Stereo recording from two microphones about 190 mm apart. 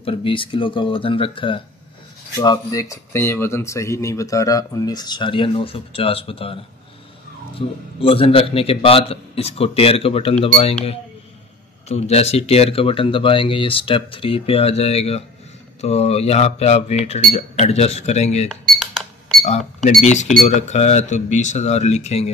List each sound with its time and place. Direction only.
0.0 s a man's voice: 25° left (ahead or behind)
11.9 s speech: 35° left (ahead or behind)
18.5 s cash register: centre (ahead or behind)
19.4 s speech: 35° left (ahead or behind)